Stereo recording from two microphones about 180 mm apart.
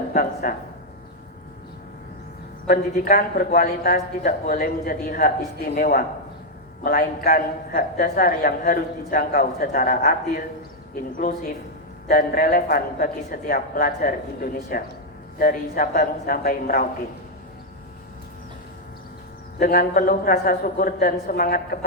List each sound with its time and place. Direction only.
0.1 s speech: 55° left (ahead or behind)
2.6 s a man's voice: 55° left (ahead or behind)
19.5 s a man's voice: 55° left (ahead or behind)